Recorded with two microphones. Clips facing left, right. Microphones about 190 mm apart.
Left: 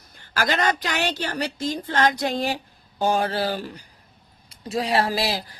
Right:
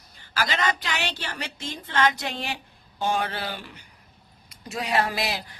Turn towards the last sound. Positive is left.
turn(degrees=30)  # may be behind; listen again after turning